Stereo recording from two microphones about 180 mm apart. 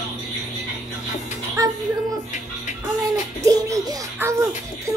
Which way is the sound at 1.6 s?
20° right (ahead or behind).